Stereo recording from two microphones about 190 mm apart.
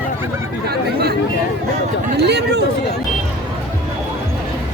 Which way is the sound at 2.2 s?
60° right (ahead or behind).